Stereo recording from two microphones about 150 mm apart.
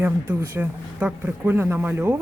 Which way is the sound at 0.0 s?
15° right (ahead or behind).